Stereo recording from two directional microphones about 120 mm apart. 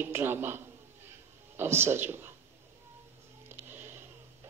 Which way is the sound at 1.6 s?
20° right (ahead or behind).